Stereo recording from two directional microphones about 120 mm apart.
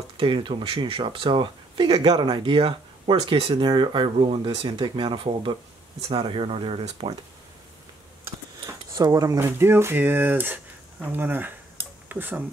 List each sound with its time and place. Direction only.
0.2 s speech: 45° right (ahead or behind); by 7.2 s 60° right (ahead or behind)
8.6 s cutlery: 30° right (ahead or behind)
9.4 s speech: 20° right (ahead or behind)